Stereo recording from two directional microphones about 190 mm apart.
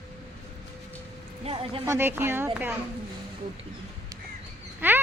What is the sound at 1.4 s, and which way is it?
Speech, 30° right (ahead or behind).